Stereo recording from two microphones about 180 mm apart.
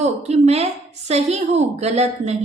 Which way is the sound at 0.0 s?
35° right (ahead or behind).